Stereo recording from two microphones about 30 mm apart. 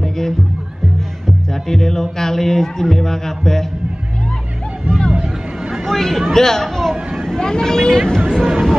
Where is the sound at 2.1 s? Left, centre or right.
Centre.